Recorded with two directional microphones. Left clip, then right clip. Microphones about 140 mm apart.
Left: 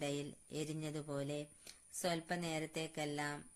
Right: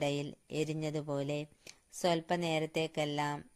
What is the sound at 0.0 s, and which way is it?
Speech, 40° right (ahead or behind).